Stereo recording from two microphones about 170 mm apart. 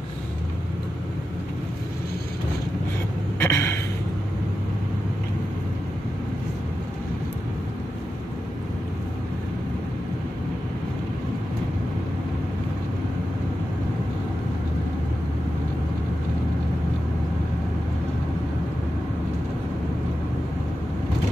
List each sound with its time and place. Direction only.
3.3 s gasp: 15° left (ahead or behind)